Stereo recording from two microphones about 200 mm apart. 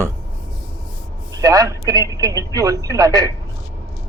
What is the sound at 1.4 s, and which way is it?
A man's voice, 15° right (ahead or behind).